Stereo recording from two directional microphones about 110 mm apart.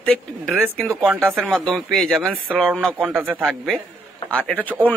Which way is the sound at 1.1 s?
20° right (ahead or behind).